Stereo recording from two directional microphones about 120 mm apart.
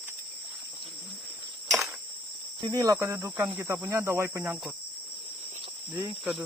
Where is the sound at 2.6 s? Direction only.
30° right (ahead or behind).